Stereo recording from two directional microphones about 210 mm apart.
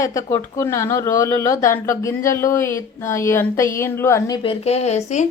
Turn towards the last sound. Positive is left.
turn(degrees=35)  # may be behind; listen again after turning